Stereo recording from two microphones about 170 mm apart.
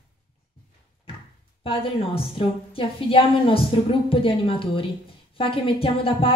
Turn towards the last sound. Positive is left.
turn(degrees=30)  # may be behind; listen again after turning